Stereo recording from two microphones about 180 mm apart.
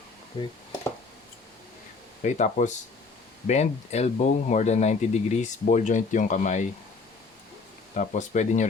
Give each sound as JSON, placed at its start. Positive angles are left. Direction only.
{"t": 0.4, "sound": "speech", "side_deg": 25}
{"t": 2.2, "sound": "speech", "side_deg": 40}
{"t": 7.9, "sound": "speech", "side_deg": 45}